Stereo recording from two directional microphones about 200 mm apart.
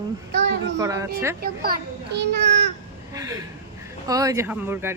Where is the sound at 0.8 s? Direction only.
15° right (ahead or behind).